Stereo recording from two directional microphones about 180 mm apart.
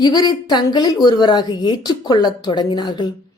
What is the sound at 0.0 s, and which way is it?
Speech, 25° left (ahead or behind).